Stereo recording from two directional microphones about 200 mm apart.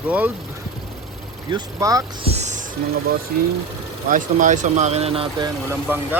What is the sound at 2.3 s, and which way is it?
Music, 35° right (ahead or behind).